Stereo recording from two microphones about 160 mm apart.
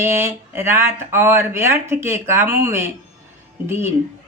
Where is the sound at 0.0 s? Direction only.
15° right (ahead or behind).